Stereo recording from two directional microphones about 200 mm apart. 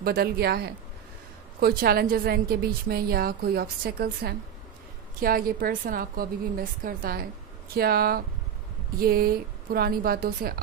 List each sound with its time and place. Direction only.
0.0 s a woman's voice: 50° right (ahead or behind)